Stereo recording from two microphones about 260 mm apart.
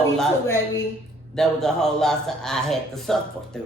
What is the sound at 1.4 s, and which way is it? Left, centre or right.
Speech, centre.